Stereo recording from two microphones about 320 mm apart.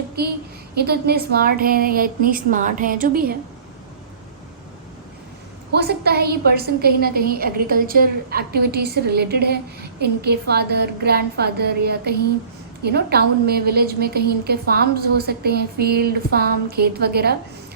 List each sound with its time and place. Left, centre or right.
0.2 s a woman's voice: right
5.7 s a woman's voice: right